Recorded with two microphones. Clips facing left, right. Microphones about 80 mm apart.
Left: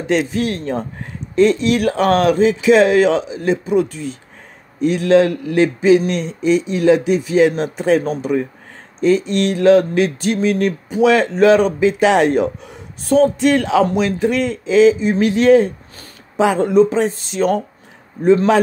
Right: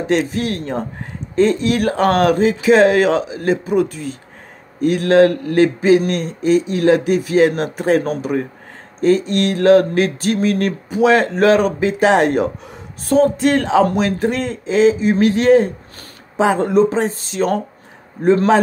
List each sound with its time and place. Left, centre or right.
0.0 s a man's voice: right